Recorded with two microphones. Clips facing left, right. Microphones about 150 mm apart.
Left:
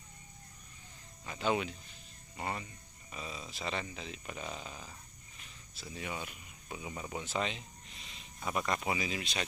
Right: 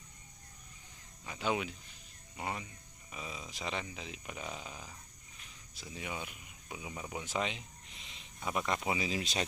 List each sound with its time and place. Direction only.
1.2 s speech: 10° right (ahead or behind)
9.0 s speech: 30° right (ahead or behind)